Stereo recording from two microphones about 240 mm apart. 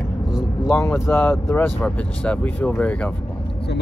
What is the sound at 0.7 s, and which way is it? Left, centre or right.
Speech, centre.